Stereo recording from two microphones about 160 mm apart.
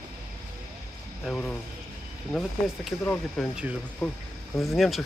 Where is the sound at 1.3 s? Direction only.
Centre (ahead or behind).